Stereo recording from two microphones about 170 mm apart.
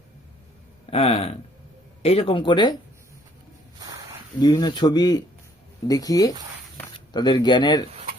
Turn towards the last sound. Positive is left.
turn(degrees=25)  # may be behind; listen again after turning